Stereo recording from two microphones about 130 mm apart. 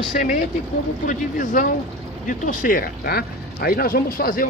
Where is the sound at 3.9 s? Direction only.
90° left.